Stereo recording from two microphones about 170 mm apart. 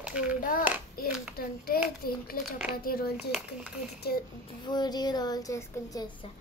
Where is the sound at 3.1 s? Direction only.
5° right (ahead or behind).